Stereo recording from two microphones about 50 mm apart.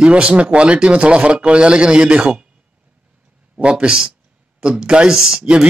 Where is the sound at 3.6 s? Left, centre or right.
Right.